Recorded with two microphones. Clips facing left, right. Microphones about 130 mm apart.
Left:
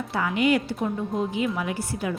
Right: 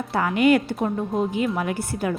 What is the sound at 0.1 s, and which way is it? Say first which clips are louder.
A woman's voice: right 4 dB; 50° right (ahead or behind).